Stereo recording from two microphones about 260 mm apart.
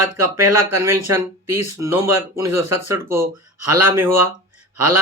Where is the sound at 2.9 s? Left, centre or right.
Centre.